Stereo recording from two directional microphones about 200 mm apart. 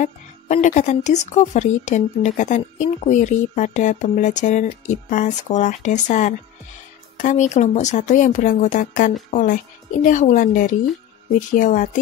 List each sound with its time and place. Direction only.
0.0 s speech: 40° left (ahead or behind)